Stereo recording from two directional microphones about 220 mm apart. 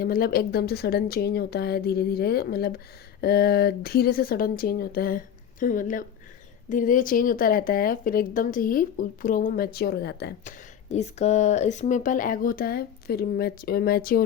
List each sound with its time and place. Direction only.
0.0 s a woman's voice: 45° left (ahead or behind)
10.8 s speech: 30° left (ahead or behind)